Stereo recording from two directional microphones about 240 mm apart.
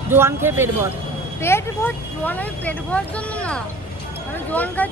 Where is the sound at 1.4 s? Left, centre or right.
Centre.